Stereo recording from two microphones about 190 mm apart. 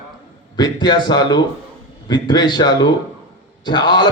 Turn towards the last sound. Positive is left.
turn(degrees=25)  # may be behind; listen again after turning